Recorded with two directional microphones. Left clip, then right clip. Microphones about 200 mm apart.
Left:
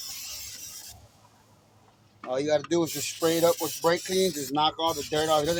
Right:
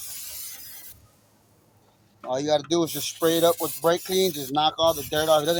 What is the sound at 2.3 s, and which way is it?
Speech, 40° right (ahead or behind).